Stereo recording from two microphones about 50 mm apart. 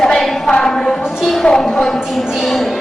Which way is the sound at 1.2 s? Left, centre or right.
Centre.